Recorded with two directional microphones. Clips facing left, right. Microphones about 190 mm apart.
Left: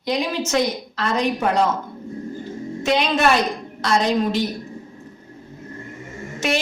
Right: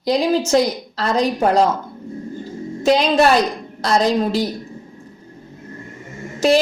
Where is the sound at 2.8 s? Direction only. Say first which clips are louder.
Right 5 dB; 35° right (ahead or behind).